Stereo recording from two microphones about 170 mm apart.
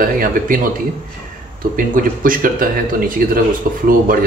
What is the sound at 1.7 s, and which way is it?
A man's voice, 55° right (ahead or behind).